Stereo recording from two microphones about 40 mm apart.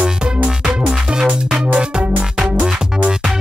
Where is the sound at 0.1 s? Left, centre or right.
Right.